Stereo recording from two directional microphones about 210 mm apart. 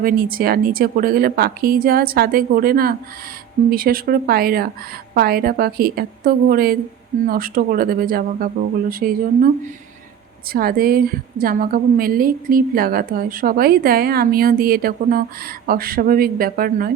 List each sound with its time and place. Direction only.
0.0 s a woman's voice: 45° right (ahead or behind)
10.5 s a woman's voice: 45° right (ahead or behind)